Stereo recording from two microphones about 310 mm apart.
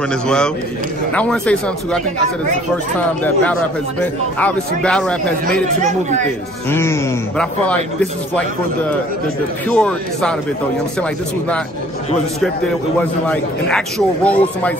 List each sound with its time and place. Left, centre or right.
1.1 s a man's voice: centre
3.0 s a man's voice: centre
5.8 s speech: right
6.7 s a man's voice: centre
9.7 s a man's voice: centre
13.3 s a man's voice: centre